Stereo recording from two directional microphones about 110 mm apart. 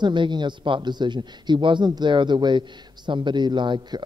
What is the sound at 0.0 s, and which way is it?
Speech, 45° right (ahead or behind).